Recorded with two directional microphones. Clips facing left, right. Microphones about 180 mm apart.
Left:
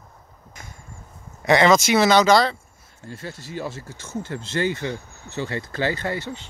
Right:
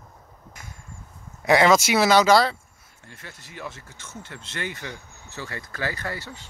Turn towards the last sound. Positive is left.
turn(degrees=20)  # may be behind; listen again after turning